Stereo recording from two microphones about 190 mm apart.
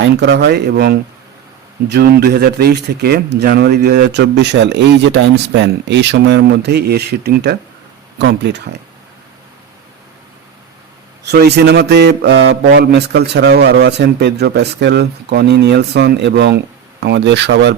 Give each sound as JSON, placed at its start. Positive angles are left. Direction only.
{"t": 0.0, "sound": "speech", "side_deg": -65}
{"t": 11.3, "sound": "speech", "side_deg": -60}